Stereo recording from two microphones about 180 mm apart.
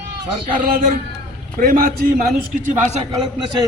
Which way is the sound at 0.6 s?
50° right (ahead or behind).